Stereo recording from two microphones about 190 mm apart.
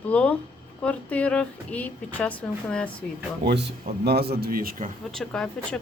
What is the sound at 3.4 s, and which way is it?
Speech, 60° right (ahead or behind).